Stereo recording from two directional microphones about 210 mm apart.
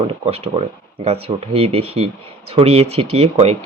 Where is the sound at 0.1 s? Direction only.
30° right (ahead or behind).